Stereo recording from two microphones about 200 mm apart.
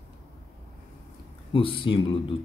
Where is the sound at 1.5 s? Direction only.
25° left (ahead or behind).